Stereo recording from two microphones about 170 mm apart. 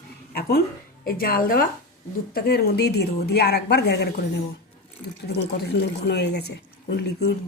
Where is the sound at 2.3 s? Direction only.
70° left (ahead or behind).